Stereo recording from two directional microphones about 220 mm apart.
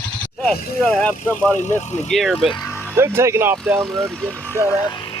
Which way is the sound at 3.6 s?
Centre (ahead or behind).